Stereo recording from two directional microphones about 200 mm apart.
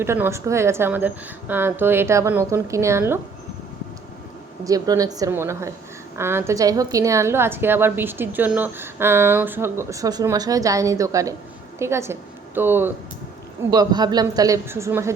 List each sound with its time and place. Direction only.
0.0 s a woman's voice: 10° right (ahead or behind)
4.6 s a woman's voice: 15° right (ahead or behind)
13.7 s a woman's voice: 20° right (ahead or behind)